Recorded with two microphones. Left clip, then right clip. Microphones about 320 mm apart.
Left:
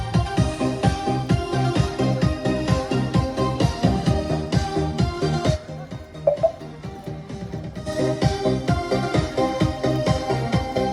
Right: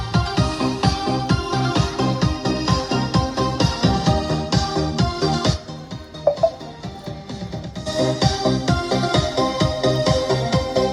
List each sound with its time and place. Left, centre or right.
0.1 s music: centre
7.9 s music: centre